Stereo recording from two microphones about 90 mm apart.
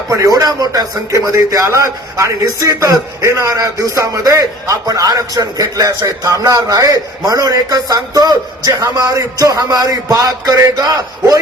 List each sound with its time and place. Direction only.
0.1 s a man's voice: 40° right (ahead or behind)